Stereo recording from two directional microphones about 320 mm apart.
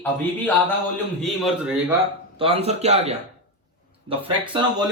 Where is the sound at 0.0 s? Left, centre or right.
Centre.